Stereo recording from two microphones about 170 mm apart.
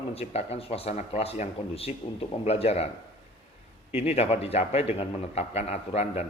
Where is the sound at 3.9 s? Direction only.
35° left (ahead or behind).